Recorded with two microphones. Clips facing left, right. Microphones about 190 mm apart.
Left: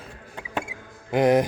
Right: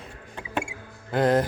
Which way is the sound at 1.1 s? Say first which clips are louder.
Left 3 dB; 15° left (ahead or behind).